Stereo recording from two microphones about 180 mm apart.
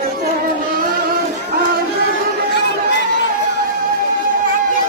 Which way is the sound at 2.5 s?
70° left (ahead or behind).